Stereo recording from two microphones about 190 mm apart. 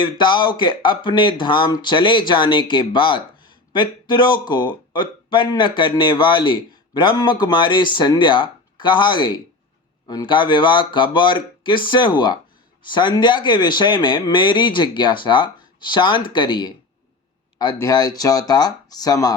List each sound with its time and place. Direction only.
0.0 s speech: 25° left (ahead or behind)